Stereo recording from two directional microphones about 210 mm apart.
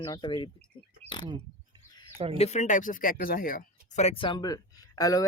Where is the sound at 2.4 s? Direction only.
35° left (ahead or behind).